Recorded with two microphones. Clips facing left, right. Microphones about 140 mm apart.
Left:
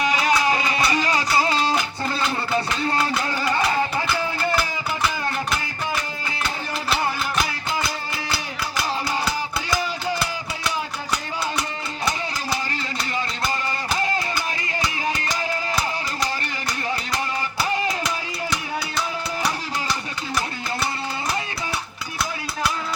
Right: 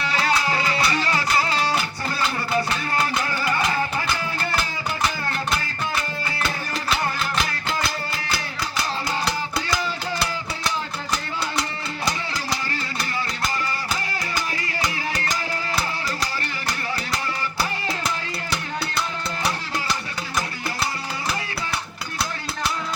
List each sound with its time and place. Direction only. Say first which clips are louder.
0.0 s music: left 3 dB; 15° left (ahead or behind)